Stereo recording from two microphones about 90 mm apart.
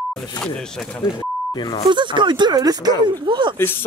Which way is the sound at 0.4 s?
5° left (ahead or behind).